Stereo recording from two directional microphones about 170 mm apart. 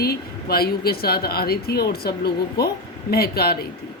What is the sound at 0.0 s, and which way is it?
A woman's voice, 65° left (ahead or behind).